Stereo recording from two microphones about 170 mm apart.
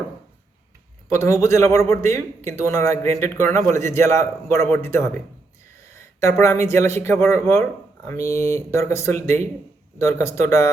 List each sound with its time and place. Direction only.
1.1 s a man's voice: 15° left (ahead or behind)